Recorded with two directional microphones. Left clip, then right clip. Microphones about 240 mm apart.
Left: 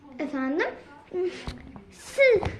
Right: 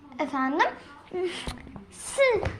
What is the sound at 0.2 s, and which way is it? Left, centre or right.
A woman's voice, right.